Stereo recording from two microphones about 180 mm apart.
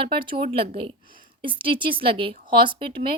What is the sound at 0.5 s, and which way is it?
Speech, 30° right (ahead or behind).